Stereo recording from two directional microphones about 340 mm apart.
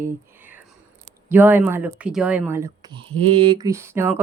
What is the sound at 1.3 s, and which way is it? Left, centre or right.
Speech, centre.